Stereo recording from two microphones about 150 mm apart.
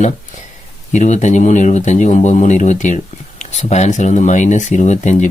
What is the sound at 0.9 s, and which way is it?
Speech, 50° left (ahead or behind).